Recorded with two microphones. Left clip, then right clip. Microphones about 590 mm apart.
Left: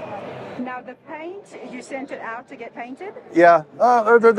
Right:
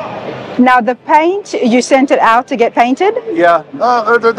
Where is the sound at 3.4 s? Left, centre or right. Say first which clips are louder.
Right 1 dB; left.